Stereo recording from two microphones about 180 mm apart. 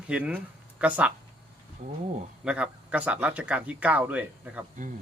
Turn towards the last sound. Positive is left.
turn(degrees=-10)  # may be behind; listen again after turning